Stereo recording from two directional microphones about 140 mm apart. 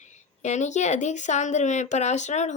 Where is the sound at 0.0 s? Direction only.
55° left (ahead or behind).